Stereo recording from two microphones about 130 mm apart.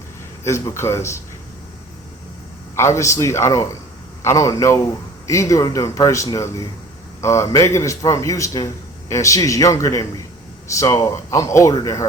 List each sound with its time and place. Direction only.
0.4 s a man's voice: 20° left (ahead or behind)
2.7 s a man's voice: 20° left (ahead or behind)